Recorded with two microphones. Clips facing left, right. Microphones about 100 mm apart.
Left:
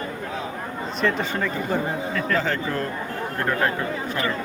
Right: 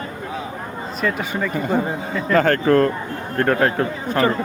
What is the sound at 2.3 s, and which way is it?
Speech, 60° right (ahead or behind).